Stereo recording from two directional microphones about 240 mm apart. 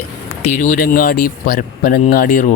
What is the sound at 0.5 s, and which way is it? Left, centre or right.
Speech, left.